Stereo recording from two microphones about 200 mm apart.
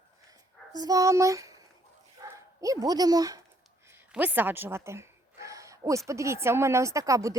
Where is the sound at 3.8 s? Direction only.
10° right (ahead or behind).